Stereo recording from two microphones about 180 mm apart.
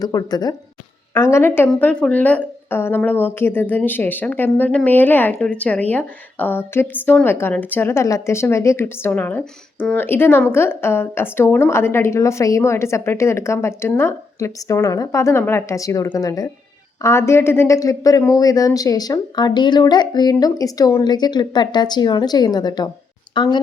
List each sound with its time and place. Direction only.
0.0 s a woman's voice: 20° left (ahead or behind)